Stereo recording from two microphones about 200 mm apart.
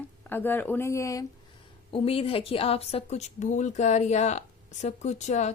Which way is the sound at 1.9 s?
30° left (ahead or behind).